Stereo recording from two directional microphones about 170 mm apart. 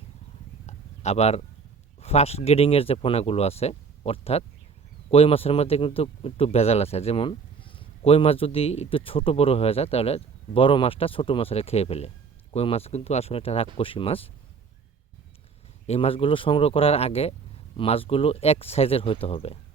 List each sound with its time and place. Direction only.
0.7 s a sound: 40° left (ahead or behind)
2.0 s speech: 40° left (ahead or behind)
15.9 s speech: 35° left (ahead or behind)